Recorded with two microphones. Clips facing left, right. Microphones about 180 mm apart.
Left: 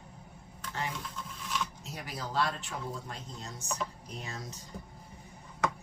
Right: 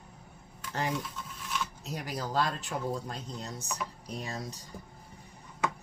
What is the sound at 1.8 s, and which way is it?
Speech, 40° right (ahead or behind).